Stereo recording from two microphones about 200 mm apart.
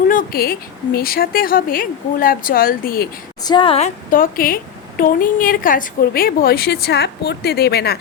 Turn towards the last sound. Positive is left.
turn(degrees=55)  # may be behind; listen again after turning